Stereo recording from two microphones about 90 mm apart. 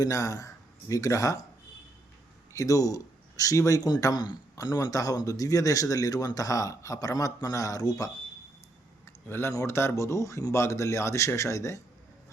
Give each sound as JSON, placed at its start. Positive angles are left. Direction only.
{"t": 0.0, "sound": "speech", "side_deg": 40}
{"t": 2.6, "sound": "a man's voice", "side_deg": 40}
{"t": 9.0, "sound": "a man's voice", "side_deg": 30}